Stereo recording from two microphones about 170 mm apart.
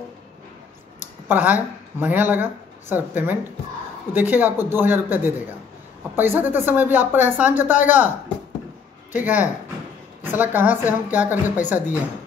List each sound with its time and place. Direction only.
1.3 s a woman's voice: 10° right (ahead or behind)